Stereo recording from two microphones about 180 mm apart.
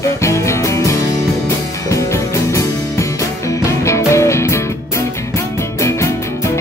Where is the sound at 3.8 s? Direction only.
15° left (ahead or behind).